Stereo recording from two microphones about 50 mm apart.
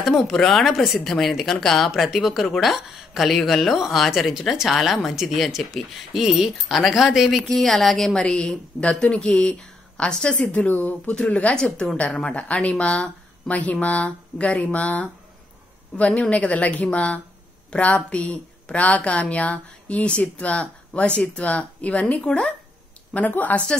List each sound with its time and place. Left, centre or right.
0.0 s speech: centre
7.4 s speech: centre
8.2 s a woman's voice: centre; by 11.0 s left
11.2 s a woman's voice: left
23.1 s a woman's voice: left